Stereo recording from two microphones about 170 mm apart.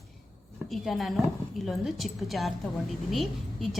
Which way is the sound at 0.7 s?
Centre (ahead or behind).